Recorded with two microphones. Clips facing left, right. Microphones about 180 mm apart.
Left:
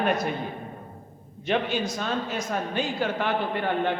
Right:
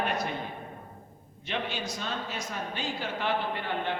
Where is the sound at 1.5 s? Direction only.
50° left (ahead or behind).